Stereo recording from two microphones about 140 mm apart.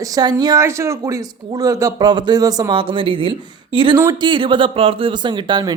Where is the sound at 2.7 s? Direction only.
40° right (ahead or behind).